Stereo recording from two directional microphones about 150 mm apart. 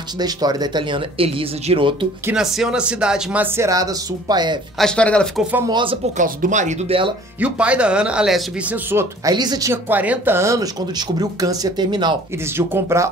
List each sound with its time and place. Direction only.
0.2 s speech: 25° right (ahead or behind)
2.3 s speech: 5° right (ahead or behind)
3.5 s speech: 20° right (ahead or behind)
4.7 s speech: 5° left (ahead or behind)
5.7 s speech: 30° right (ahead or behind)
6.1 s speech: 60° right (ahead or behind)
6.9 s speech: 40° right (ahead or behind)
7.3 s speech: 10° right (ahead or behind)
8.9 s speech: 25° right (ahead or behind)
12.5 s speech: 15° right (ahead or behind)